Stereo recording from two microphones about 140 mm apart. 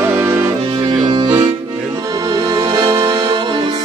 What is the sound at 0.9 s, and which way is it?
Accordion, 30° right (ahead or behind).